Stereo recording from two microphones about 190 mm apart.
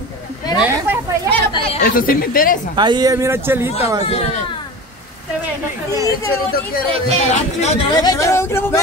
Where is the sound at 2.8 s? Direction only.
25° right (ahead or behind).